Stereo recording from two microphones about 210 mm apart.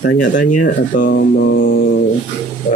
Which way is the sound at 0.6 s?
40° left (ahead or behind).